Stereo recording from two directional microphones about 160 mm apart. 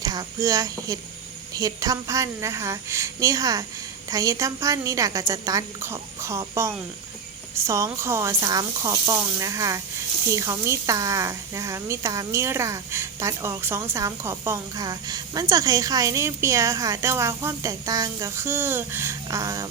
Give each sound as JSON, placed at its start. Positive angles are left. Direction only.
{"t": 0.0, "sound": "speech", "side_deg": -25}